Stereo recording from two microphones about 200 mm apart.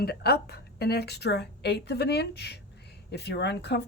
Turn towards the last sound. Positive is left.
turn(degrees=60)  # may be behind; listen again after turning